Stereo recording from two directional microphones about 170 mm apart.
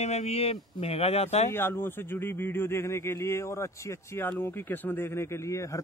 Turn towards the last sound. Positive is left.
turn(degrees=15)  # may be behind; listen again after turning